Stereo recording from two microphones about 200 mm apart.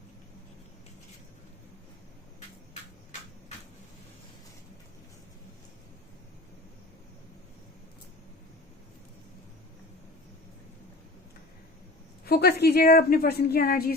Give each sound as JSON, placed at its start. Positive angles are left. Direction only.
{"t": 12.2, "sound": "a woman's voice", "side_deg": 50}